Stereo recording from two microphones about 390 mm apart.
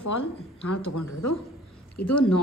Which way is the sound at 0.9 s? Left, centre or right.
Left.